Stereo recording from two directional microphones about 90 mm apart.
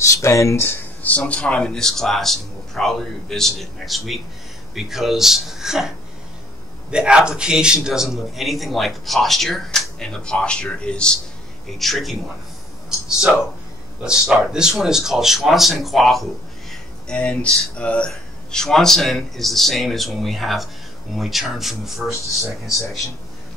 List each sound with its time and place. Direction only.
0.0 s speech: 35° left (ahead or behind)
1.3 s a man's voice: 10° left (ahead or behind)
11.8 s a man's voice: centre (ahead or behind)
14.0 s a man's voice: 5° right (ahead or behind)